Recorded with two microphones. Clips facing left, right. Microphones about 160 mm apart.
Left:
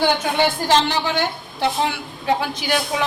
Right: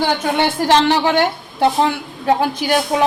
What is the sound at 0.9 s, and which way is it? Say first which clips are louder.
Speech: right 7 dB; 65° right (ahead or behind).